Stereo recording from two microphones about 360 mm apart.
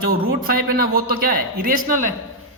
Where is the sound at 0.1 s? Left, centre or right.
Right.